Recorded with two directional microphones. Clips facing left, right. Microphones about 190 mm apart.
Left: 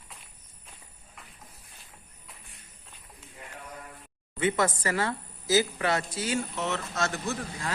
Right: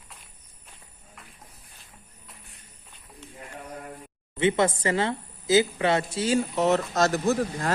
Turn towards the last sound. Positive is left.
turn(degrees=-40)  # may be behind; listen again after turning